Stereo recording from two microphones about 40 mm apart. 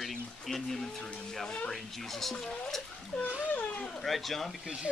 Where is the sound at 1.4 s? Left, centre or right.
Left.